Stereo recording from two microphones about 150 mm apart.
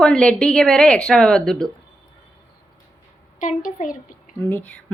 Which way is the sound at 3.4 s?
60° left (ahead or behind).